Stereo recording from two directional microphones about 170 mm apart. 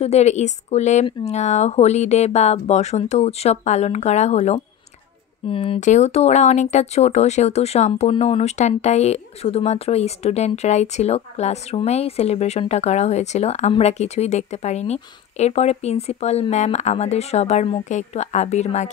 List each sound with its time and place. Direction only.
0.0 s speech: 40° left (ahead or behind)